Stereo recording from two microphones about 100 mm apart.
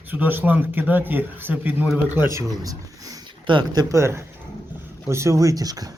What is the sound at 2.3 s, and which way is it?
Speech, 35° right (ahead or behind).